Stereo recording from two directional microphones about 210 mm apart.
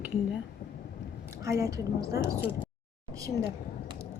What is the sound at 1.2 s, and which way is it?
A woman's voice, 15° right (ahead or behind).